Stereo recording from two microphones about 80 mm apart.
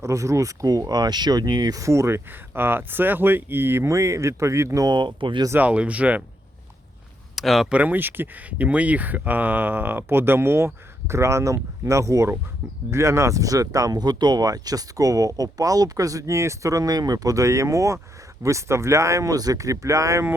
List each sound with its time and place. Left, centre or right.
0.0 s speech: right
3.8 s speech: right
4.9 s speech: right
5.5 s speech: centre
7.3 s speech: centre
7.7 s speech: centre; by 20.2 s right